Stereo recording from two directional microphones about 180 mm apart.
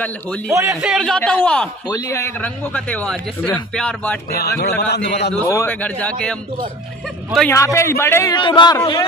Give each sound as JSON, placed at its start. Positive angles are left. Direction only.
{"t": 0.5, "sound": "a man's voice", "side_deg": -15}
{"t": 0.7, "sound": "a man's voice", "side_deg": 0}
{"t": 1.9, "sound": "a man's voice", "side_deg": 20}
{"t": 4.3, "sound": "a man's voice", "side_deg": 60}
{"t": 5.4, "sound": "a man's voice", "side_deg": 15}
{"t": 7.5, "sound": "a man's voice", "side_deg": 15}
{"t": 8.4, "sound": "speech", "side_deg": 25}